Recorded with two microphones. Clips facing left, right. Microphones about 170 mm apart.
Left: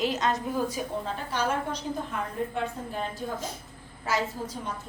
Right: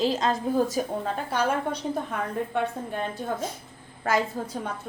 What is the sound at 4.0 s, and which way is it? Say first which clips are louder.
Speech: right 4 dB; 55° right (ahead or behind).